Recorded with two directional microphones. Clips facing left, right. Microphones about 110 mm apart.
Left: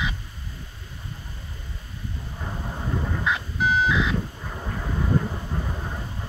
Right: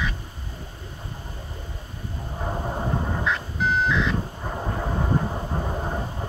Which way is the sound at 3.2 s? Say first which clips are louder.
Even; 5° left (ahead or behind).